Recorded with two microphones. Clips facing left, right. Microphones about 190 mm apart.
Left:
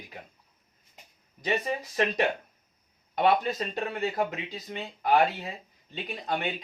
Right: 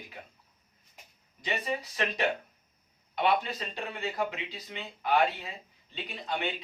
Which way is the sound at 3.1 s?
45° left (ahead or behind).